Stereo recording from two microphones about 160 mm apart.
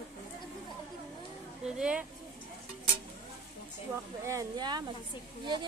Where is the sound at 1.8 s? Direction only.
5° right (ahead or behind).